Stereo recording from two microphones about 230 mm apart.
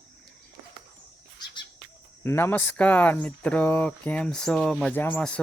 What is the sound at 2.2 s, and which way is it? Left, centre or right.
Speech, centre.